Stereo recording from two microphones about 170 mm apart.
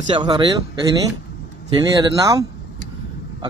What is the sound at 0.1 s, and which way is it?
Speech, 25° right (ahead or behind).